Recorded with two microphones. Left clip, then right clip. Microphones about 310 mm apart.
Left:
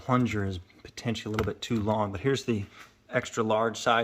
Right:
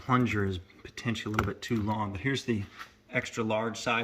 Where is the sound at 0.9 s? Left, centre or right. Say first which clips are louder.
Even; centre.